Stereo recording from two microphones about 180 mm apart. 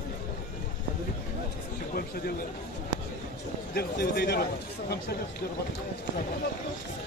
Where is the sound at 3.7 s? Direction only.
60° left (ahead or behind).